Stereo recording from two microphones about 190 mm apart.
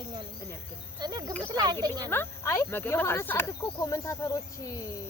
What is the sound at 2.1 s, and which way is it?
Speech, 15° left (ahead or behind).